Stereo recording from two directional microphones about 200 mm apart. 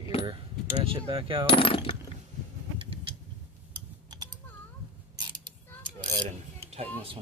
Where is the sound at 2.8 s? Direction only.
25° right (ahead or behind).